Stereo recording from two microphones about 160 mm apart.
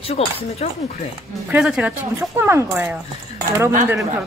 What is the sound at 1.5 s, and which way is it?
Speech, 5° right (ahead or behind).